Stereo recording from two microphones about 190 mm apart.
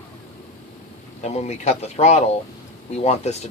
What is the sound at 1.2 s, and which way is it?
Speech, 35° left (ahead or behind).